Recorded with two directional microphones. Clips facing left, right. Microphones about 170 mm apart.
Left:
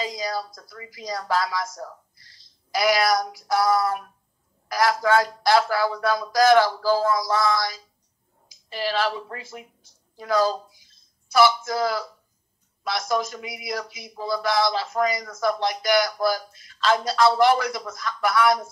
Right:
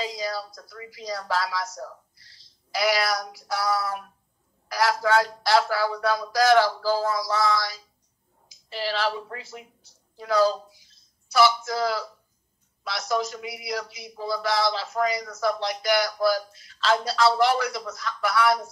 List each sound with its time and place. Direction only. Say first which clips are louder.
0.8 s speech: left 2 dB; 50° left (ahead or behind)
2.8 s speech: left 4 dB; 50° left (ahead or behind)
8.7 s speech: left 2 dB; 50° left (ahead or behind)